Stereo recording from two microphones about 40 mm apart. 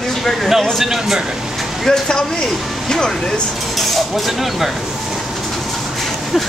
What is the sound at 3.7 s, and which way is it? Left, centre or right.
Speech, centre.